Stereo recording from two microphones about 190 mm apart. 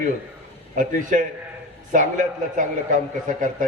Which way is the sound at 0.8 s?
45° right (ahead or behind).